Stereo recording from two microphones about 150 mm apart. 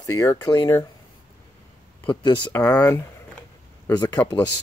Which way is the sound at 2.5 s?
25° left (ahead or behind).